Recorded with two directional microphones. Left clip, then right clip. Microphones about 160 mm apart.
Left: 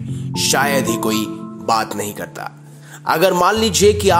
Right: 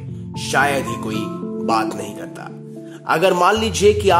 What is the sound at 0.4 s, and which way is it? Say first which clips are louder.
Speech: left 1 dB; 25° left (ahead or behind).